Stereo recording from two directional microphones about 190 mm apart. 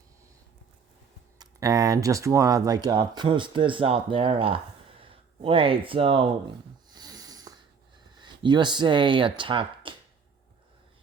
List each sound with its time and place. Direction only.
1.4 s speech: 20° right (ahead or behind)
6.9 s a sound: 20° right (ahead or behind)
8.2 s speech: 25° right (ahead or behind)